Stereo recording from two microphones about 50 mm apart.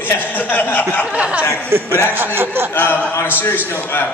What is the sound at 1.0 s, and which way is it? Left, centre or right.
Speech, right.